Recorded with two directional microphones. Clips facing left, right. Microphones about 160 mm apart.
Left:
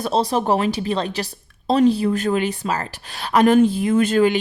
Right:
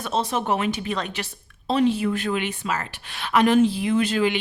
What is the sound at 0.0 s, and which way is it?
Speech, 35° left (ahead or behind).